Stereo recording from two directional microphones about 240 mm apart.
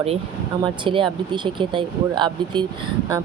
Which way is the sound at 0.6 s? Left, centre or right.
Right.